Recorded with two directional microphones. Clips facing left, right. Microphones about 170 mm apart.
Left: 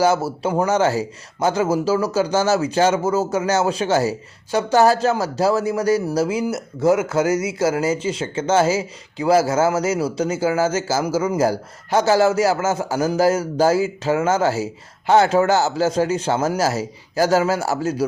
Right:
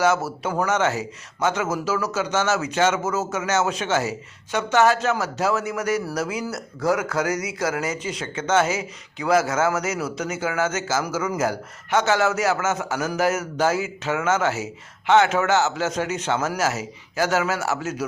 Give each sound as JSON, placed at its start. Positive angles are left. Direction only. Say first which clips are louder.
{"t": 0.0, "sound": "speech", "louder": "left 3 dB", "side_deg": 30}